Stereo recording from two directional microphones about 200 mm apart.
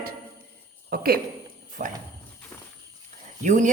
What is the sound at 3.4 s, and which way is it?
Speech, 40° right (ahead or behind).